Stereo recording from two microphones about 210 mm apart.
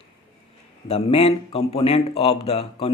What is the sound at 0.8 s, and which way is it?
A man's voice, 30° left (ahead or behind).